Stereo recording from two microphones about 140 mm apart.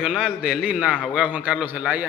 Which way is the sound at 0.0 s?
5° right (ahead or behind).